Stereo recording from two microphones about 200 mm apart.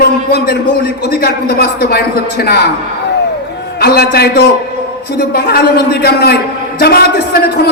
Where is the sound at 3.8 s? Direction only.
50° left (ahead or behind).